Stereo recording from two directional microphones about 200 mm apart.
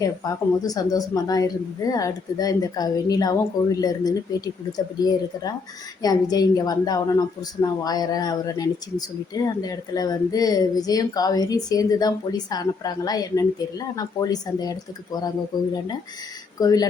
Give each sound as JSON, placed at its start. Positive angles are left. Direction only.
{"t": 0.0, "sound": "speech", "side_deg": 20}
{"t": 16.6, "sound": "speech", "side_deg": 20}